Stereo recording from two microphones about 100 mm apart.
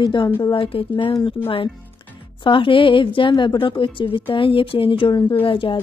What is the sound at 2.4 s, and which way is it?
A woman's voice, 60° left (ahead or behind).